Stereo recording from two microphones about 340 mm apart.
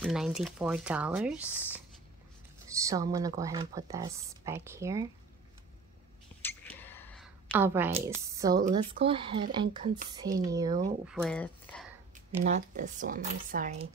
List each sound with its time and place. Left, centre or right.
0.0 s speech: centre
6.4 s a sound: centre
7.9 s speech: centre
11.1 s speech: centre
12.4 s speech: right